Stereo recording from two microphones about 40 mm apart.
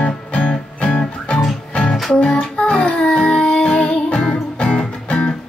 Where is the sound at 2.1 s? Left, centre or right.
Left.